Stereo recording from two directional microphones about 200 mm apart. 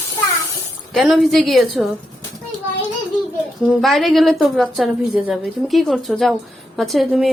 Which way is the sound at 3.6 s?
Centre (ahead or behind).